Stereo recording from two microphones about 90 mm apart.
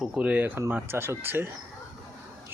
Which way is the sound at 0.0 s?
15° right (ahead or behind).